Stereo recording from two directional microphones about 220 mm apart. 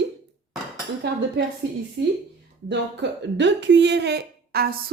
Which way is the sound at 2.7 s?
55° right (ahead or behind).